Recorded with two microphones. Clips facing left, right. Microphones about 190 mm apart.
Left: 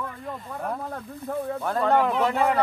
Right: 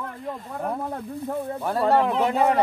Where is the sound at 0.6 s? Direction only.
15° right (ahead or behind).